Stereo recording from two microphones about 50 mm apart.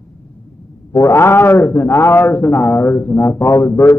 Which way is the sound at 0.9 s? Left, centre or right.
Left.